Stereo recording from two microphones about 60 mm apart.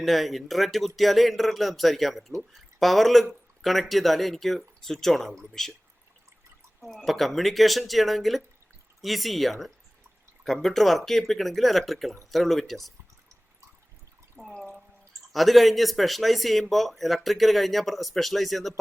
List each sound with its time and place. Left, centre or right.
0.0 s a man's voice: centre
6.8 s a man's voice: centre
14.4 s a sound: centre
15.3 s a man's voice: centre